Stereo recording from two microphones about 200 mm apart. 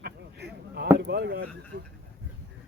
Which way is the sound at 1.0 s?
55° right (ahead or behind).